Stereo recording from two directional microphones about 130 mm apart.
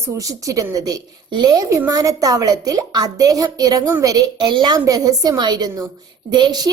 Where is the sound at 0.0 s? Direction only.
25° right (ahead or behind).